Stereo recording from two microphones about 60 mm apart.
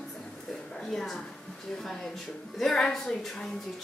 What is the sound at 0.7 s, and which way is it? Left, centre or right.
A woman's voice, centre.